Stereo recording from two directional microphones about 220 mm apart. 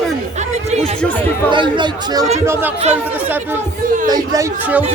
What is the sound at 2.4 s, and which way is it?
Speech, 10° right (ahead or behind).